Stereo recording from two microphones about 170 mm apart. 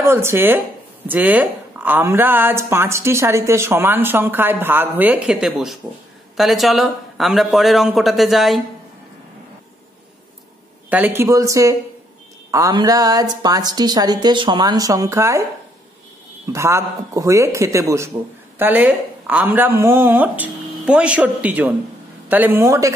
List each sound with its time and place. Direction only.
0.0 s a man's voice: 15° right (ahead or behind)
10.9 s a woman's voice: 10° right (ahead or behind)
16.5 s speech: 15° right (ahead or behind)